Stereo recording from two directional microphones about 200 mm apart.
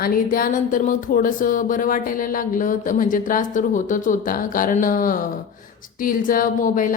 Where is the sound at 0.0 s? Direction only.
45° left (ahead or behind).